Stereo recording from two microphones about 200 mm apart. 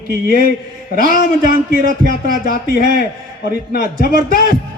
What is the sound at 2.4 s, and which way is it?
Speech, 50° left (ahead or behind).